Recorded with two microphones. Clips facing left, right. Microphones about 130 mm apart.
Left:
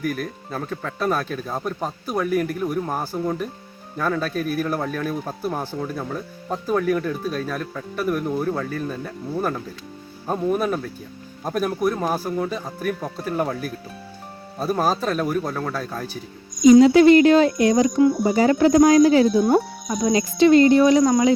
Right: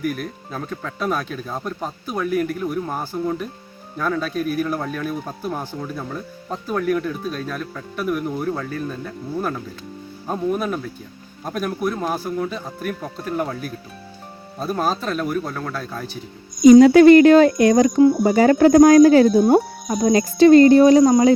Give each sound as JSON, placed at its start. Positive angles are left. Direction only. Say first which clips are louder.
{"t": 0.0, "sound": "speech", "louder": "right 1 dB", "side_deg": 0}
{"t": 16.6, "sound": "speech", "louder": "right 3 dB", "side_deg": -55}
{"t": 21.0, "sound": "speech", "louder": "right 4 dB", "side_deg": -25}